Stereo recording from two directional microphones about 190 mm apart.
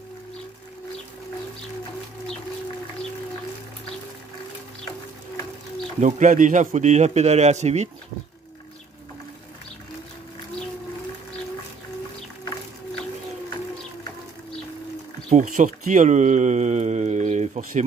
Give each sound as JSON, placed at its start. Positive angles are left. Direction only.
{"t": 5.9, "sound": "a man's voice", "side_deg": -40}
{"t": 15.2, "sound": "speech", "side_deg": -40}